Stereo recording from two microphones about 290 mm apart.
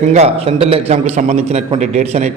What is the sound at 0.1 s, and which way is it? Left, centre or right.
A man's voice, right.